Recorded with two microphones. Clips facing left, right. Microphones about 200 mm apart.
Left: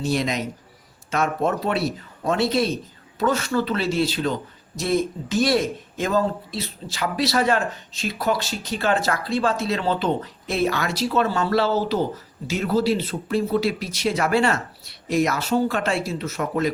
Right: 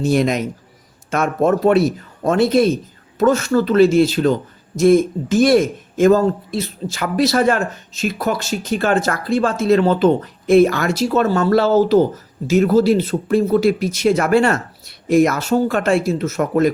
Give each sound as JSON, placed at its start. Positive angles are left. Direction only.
{"t": 0.0, "sound": "a man's voice", "side_deg": -50}